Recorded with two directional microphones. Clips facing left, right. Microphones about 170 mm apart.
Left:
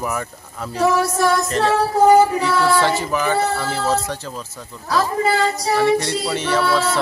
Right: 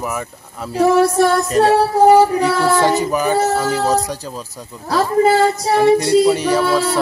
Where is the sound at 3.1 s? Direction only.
15° right (ahead or behind).